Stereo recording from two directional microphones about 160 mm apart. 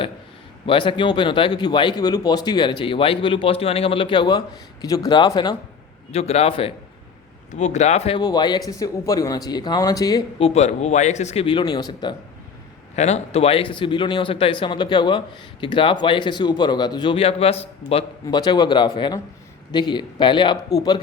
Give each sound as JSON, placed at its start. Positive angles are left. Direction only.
{"t": 0.6, "sound": "a man's voice", "side_deg": 35}
{"t": 6.1, "sound": "speech", "side_deg": 40}
{"t": 7.5, "sound": "speech", "side_deg": 45}
{"t": 8.2, "sound": "a man's voice", "side_deg": 25}
{"t": 10.3, "sound": "speech", "side_deg": 40}
{"t": 13.0, "sound": "a man's voice", "side_deg": 45}
{"t": 18.3, "sound": "a man's voice", "side_deg": 25}